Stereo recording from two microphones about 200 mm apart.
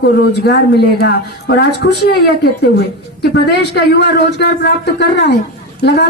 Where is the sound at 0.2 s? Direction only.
50° left (ahead or behind).